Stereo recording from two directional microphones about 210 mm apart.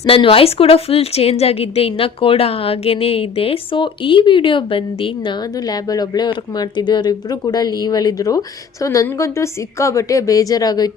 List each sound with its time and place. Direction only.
0.0 s a woman's voice: 25° left (ahead or behind)